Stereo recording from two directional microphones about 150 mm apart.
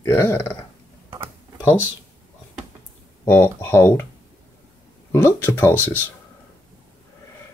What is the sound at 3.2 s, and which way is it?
Speech, 15° left (ahead or behind).